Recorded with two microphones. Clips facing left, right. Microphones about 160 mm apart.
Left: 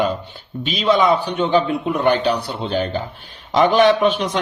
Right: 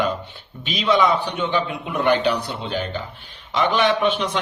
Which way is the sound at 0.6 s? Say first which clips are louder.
Left 3 dB; 35° left (ahead or behind).